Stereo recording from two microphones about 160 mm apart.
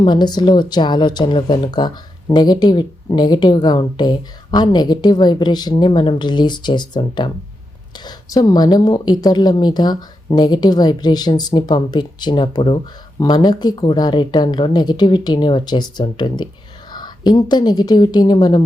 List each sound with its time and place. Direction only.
0.0 s a woman's voice: 30° left (ahead or behind)